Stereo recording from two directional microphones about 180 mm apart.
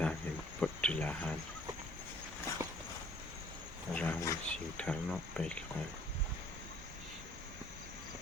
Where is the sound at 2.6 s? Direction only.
15° right (ahead or behind).